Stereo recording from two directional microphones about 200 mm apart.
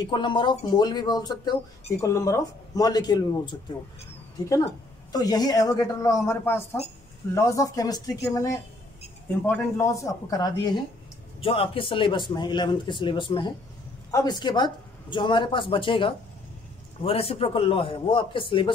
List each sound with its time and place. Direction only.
0.0 s speech: 25° left (ahead or behind)
5.1 s speech: 20° left (ahead or behind)